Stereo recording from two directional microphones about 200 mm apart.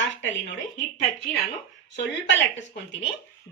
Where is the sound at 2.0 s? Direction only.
65° left (ahead or behind).